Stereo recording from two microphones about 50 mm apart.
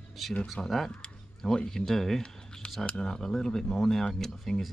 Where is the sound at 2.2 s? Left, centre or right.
Left.